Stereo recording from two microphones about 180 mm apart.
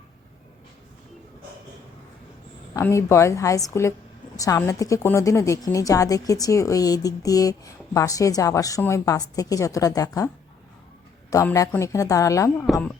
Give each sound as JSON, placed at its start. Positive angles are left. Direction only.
{"t": 2.7, "sound": "a woman's voice", "side_deg": 15}
{"t": 11.3, "sound": "a woman's voice", "side_deg": 20}